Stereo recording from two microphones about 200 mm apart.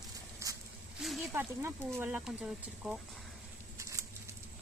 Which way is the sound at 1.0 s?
Centre (ahead or behind).